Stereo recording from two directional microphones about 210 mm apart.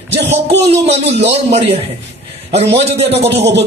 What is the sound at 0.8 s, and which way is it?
A man's voice, 30° right (ahead or behind).